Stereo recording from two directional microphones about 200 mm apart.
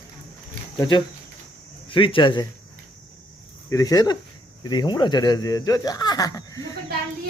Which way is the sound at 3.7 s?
15° left (ahead or behind).